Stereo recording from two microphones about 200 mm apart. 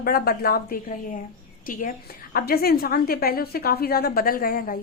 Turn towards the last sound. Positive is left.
turn(degrees=45)  # may be behind; listen again after turning